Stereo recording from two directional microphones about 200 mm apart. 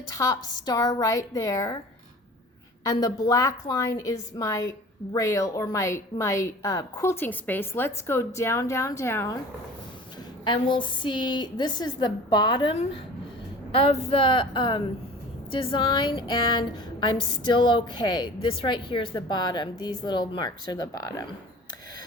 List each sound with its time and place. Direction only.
0.2 s speech: 15° left (ahead or behind)
2.8 s speech: 20° left (ahead or behind)
10.4 s speech: 25° left (ahead or behind)